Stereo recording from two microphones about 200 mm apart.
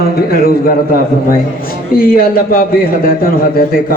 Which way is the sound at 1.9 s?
45° left (ahead or behind).